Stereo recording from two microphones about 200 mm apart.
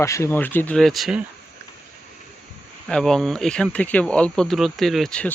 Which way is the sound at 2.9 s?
Centre (ahead or behind).